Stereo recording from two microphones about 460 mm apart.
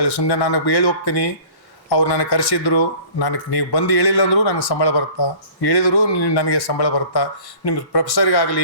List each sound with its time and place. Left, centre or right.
0.0 s speech: left